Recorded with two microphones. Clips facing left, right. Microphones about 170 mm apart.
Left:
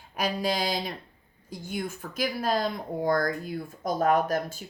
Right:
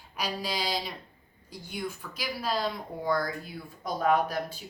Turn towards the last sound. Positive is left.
turn(degrees=45)  # may be behind; listen again after turning